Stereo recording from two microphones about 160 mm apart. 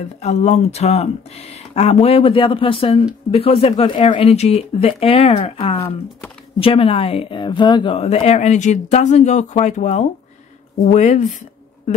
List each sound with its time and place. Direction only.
0.2 s a woman's voice: 45° left (ahead or behind)